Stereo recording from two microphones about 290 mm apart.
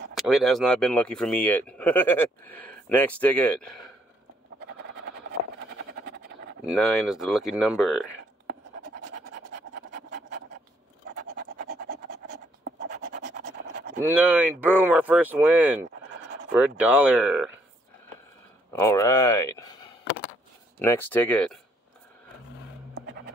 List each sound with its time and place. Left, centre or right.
0.1 s speech: centre
5.8 s a sound: right
6.6 s speech: centre
8.5 s scratch: right
14.0 s speech: centre
18.7 s speech: centre
20.8 s speech: centre